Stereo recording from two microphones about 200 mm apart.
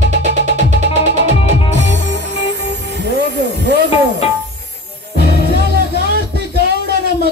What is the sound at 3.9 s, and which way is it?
Music, 30° left (ahead or behind).